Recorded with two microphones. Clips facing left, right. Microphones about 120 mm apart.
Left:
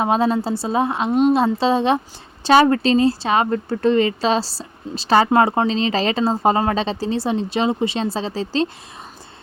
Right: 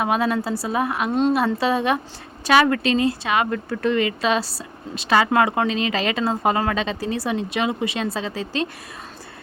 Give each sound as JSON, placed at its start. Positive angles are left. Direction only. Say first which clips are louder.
{"t": 0.0, "sound": "speech", "louder": "left 3 dB", "side_deg": 30}